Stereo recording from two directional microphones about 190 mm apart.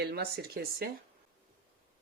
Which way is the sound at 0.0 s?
55° right (ahead or behind).